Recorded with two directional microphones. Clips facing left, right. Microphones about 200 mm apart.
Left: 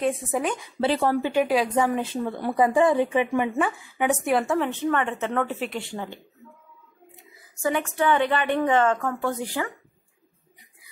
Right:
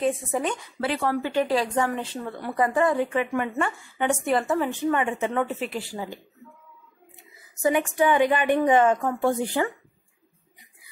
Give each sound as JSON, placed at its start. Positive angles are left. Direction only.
{"t": 0.0, "sound": "a woman's voice", "side_deg": 0}
{"t": 0.7, "sound": "speech", "side_deg": 30}
{"t": 1.2, "sound": "speech", "side_deg": 10}
{"t": 3.5, "sound": "a woman's voice", "side_deg": 5}
{"t": 7.6, "sound": "a woman's voice", "side_deg": -15}
{"t": 9.6, "sound": "speech", "side_deg": -30}